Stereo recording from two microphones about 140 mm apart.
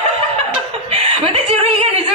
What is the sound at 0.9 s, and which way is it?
Snicker, 45° right (ahead or behind).